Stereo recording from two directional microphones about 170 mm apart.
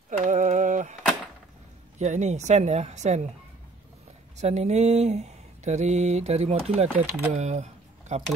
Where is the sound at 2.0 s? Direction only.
45° right (ahead or behind).